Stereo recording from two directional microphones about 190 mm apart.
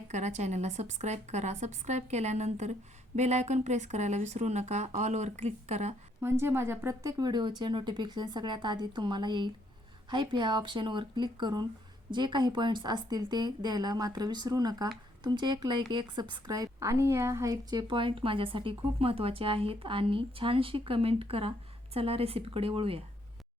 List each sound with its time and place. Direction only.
0.1 s speech: 40° right (ahead or behind)
6.2 s a woman's voice: 10° right (ahead or behind); by 23.0 s 30° right (ahead or behind)